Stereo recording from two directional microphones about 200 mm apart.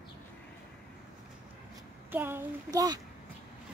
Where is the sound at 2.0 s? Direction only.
10° right (ahead or behind).